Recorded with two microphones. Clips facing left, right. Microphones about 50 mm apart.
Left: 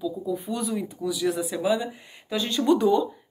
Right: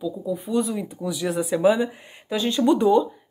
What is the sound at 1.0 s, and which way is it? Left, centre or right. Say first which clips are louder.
Speech: right 1 dB; right.